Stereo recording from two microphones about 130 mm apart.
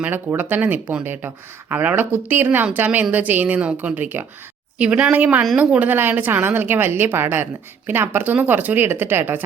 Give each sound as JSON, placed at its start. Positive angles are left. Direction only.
{"t": 0.0, "sound": "a woman's voice", "side_deg": -15}